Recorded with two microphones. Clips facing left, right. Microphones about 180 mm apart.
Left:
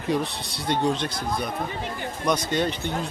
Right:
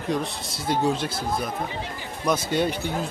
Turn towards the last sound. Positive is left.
turn(degrees=-10)  # may be behind; listen again after turning